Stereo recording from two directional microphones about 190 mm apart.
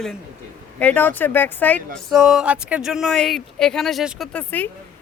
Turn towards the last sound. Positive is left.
turn(degrees=10)  # may be behind; listen again after turning